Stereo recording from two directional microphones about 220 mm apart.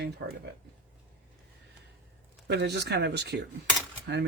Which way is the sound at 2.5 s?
50° right (ahead or behind).